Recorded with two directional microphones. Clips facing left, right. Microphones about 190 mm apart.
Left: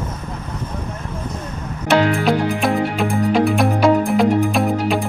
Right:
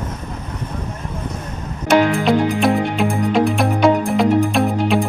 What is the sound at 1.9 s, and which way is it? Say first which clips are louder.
Music: right 1 dB; centre (ahead or behind).